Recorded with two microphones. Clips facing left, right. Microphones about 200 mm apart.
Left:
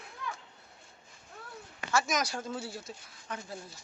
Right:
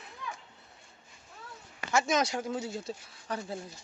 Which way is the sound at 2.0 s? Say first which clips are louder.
Right 4 dB; 25° right (ahead or behind).